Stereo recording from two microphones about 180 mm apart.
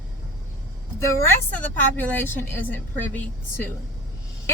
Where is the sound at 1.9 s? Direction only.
10° left (ahead or behind).